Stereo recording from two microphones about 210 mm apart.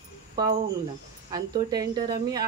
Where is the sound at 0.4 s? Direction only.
20° right (ahead or behind).